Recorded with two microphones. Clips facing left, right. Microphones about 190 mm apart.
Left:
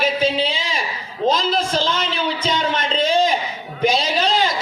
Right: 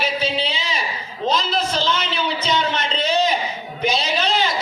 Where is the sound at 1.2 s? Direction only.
45° left (ahead or behind).